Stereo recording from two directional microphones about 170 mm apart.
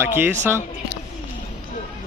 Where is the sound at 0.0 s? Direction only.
10° right (ahead or behind).